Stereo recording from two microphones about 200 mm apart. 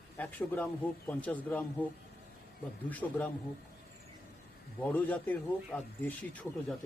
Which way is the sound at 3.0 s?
10° left (ahead or behind).